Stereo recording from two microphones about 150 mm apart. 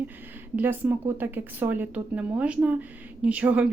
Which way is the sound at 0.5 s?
15° right (ahead or behind).